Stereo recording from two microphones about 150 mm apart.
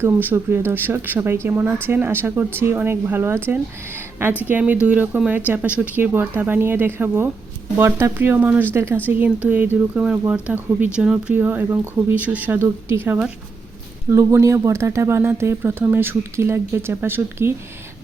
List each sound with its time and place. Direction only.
0.0 s speech: 15° right (ahead or behind)